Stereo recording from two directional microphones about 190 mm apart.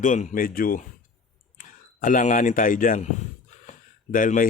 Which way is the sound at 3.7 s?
45° left (ahead or behind).